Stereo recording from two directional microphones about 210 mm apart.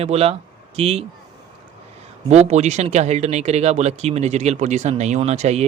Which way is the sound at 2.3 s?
30° right (ahead or behind).